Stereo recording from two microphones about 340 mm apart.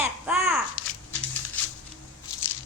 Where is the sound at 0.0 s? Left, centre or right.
Centre.